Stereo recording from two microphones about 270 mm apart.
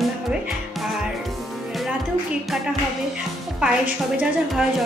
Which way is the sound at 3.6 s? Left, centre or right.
Centre.